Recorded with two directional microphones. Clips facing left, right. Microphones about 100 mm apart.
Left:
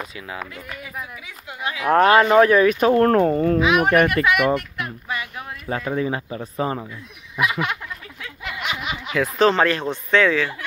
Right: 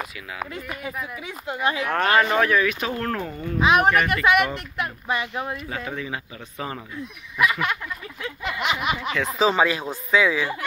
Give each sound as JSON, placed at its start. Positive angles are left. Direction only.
{"t": 1.5, "sound": "a child's voice", "side_deg": -35}
{"t": 1.9, "sound": "speech", "side_deg": 25}
{"t": 3.5, "sound": "a child's voice", "side_deg": -30}
{"t": 5.7, "sound": "speech", "side_deg": 35}
{"t": 7.3, "sound": "snicker", "side_deg": 15}
{"t": 8.2, "sound": "a sound", "side_deg": -20}
{"t": 9.1, "sound": "speech", "side_deg": 0}